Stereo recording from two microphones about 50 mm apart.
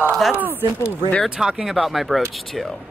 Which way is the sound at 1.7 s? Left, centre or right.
Centre.